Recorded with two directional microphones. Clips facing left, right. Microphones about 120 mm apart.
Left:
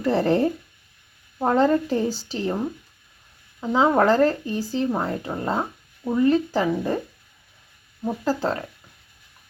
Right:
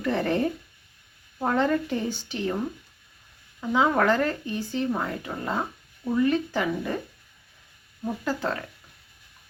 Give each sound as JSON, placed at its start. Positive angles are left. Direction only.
{"t": 0.0, "sound": "speech", "side_deg": 35}
{"t": 3.6, "sound": "speech", "side_deg": 30}
{"t": 8.0, "sound": "speech", "side_deg": 35}